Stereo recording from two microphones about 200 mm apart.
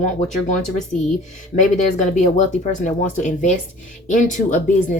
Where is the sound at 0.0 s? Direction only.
35° left (ahead or behind).